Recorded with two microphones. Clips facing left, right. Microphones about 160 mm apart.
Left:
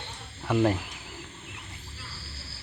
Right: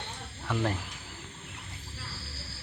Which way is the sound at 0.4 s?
15° left (ahead or behind).